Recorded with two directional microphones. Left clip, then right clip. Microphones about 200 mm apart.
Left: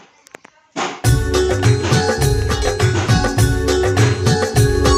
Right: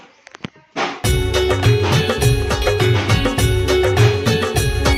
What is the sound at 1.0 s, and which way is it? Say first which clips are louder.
Music: left 1 dB; centre (ahead or behind).